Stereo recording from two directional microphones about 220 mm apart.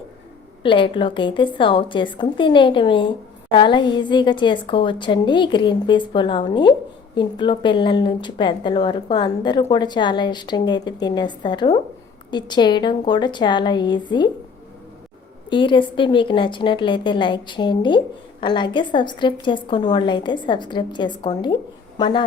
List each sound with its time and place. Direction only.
0.6 s a woman's voice: 25° left (ahead or behind)
15.4 s a woman's voice: 20° left (ahead or behind)